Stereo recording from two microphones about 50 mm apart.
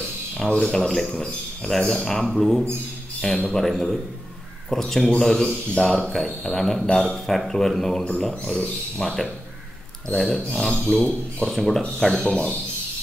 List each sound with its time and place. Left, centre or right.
0.6 s a man's voice: centre
11.1 s speech: left
11.5 s a man's voice: centre